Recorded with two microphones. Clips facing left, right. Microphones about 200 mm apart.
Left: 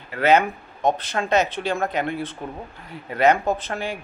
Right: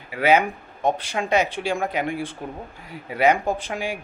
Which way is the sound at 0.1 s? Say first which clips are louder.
Left 1 dB; 10° right (ahead or behind).